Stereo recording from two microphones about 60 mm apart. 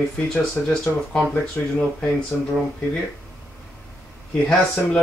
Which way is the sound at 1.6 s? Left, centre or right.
Left.